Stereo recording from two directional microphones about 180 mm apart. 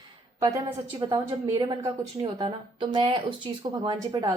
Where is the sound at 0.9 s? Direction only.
25° right (ahead or behind).